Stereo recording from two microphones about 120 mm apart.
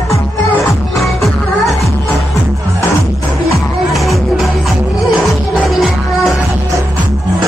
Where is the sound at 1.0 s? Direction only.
Centre (ahead or behind).